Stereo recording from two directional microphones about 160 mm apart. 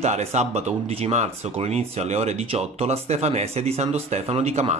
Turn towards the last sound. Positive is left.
turn(degrees=-40)  # may be behind; listen again after turning